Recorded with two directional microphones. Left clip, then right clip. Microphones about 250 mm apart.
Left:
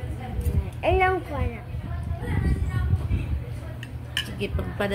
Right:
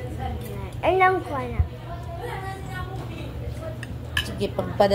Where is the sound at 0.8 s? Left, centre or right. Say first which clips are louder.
Right 3 dB; centre.